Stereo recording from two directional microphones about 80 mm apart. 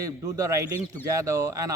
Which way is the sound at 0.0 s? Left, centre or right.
Right.